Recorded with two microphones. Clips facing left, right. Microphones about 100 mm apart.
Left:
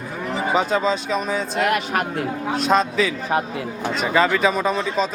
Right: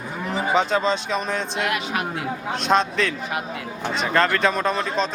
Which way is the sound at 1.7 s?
45° left (ahead or behind).